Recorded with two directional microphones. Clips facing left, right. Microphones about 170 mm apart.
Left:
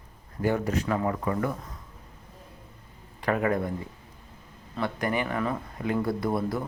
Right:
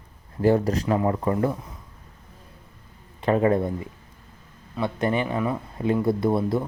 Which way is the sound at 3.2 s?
25° right (ahead or behind).